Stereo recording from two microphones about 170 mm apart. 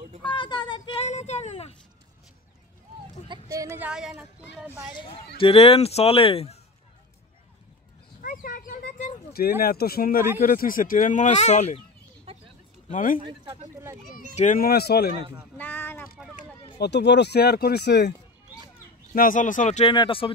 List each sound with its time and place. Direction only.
0.2 s a sound: 25° left (ahead or behind)
1.0 s child singing: 40° left (ahead or behind)
3.4 s speech: 20° right (ahead or behind)
5.4 s speech: 35° left (ahead or behind)
8.2 s a sound: 55° left (ahead or behind)
9.6 s speech: 65° left (ahead or behind); by 11.8 s 40° left (ahead or behind)
12.3 s a sound: 35° right (ahead or behind)
12.9 s speech: 55° left (ahead or behind)
14.3 s speech: 45° left (ahead or behind); by 15.1 s 70° left (ahead or behind)
15.5 s a sound: 10° left (ahead or behind)
16.8 s speech: 90° left
19.1 s speech: 50° left (ahead or behind)
19.9 s speech: 30° left (ahead or behind)